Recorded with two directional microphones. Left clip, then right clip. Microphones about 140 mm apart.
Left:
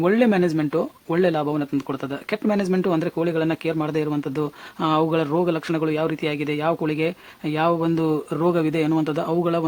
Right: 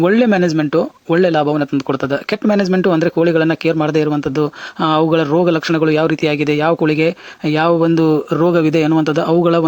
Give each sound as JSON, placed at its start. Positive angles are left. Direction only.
{"t": 0.0, "sound": "speech", "side_deg": -30}